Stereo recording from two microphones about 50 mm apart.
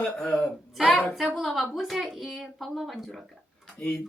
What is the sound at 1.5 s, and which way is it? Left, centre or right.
Speech, centre.